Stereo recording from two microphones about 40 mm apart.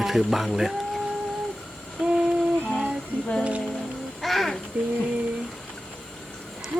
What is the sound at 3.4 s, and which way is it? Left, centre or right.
Music, right.